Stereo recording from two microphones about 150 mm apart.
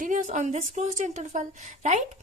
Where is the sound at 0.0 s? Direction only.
55° right (ahead or behind).